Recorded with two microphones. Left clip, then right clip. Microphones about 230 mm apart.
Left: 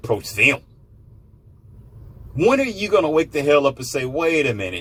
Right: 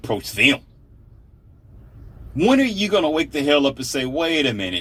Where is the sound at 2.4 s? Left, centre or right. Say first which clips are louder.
Even; right.